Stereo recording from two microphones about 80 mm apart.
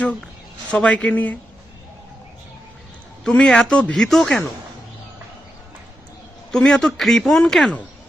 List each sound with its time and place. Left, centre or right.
0.0 s speech: centre
3.2 s speech: centre
6.5 s speech: centre